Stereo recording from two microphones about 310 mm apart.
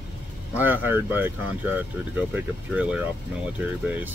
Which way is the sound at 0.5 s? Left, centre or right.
Centre.